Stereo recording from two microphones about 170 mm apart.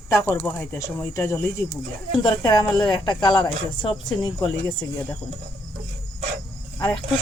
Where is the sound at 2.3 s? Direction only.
25° left (ahead or behind).